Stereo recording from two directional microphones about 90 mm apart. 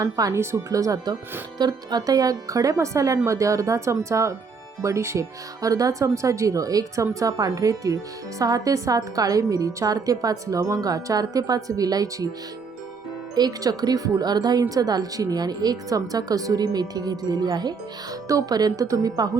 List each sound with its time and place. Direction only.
0.0 s speech: 40° right (ahead or behind)
13.3 s speech: 45° right (ahead or behind)